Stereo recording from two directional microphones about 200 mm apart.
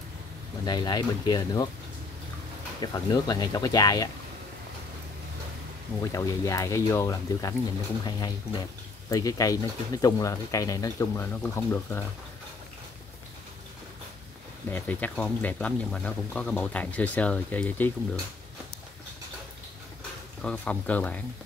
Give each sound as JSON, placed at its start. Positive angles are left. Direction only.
{"t": 0.7, "sound": "speech", "side_deg": 20}
{"t": 2.8, "sound": "speech", "side_deg": 20}
{"t": 6.1, "sound": "speech", "side_deg": 15}
{"t": 14.7, "sound": "speech", "side_deg": 10}
{"t": 20.4, "sound": "speech", "side_deg": 5}